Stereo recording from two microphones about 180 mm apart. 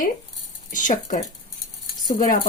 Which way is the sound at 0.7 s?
45° left (ahead or behind).